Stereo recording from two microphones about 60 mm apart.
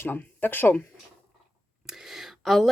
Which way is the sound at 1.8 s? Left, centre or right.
Centre.